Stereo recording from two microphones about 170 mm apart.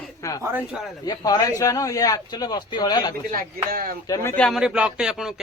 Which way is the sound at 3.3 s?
55° right (ahead or behind).